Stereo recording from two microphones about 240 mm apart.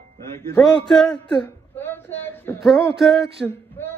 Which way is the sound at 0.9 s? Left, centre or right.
Centre.